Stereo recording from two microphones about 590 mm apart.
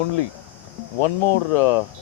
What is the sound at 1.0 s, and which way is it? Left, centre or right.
Speech, left.